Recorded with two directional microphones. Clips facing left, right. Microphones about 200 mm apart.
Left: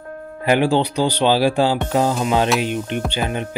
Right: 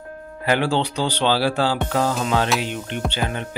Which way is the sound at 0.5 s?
15° left (ahead or behind).